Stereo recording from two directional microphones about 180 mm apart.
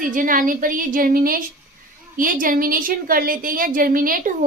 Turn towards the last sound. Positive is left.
turn(degrees=-50)  # may be behind; listen again after turning